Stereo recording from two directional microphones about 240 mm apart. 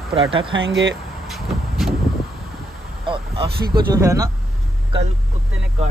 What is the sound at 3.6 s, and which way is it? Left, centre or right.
Speech, centre.